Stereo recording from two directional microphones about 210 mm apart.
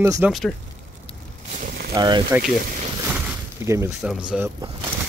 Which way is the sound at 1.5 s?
45° right (ahead or behind).